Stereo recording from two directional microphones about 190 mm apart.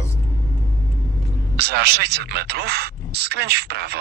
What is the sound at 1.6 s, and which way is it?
Speech, 60° right (ahead or behind).